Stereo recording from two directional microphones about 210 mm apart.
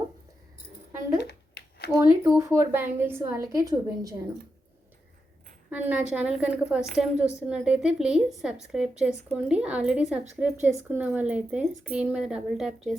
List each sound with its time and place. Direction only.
1.2 s a sound: 50° left (ahead or behind)
2.0 s a woman's voice: 15° right (ahead or behind)
5.7 s a woman's voice: 5° right (ahead or behind)